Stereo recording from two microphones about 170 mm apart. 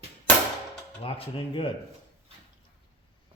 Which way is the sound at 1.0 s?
30° left (ahead or behind).